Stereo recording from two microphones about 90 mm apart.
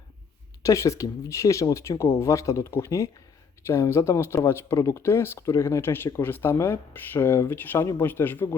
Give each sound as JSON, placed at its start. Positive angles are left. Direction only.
{"t": 0.6, "sound": "speech", "side_deg": 35}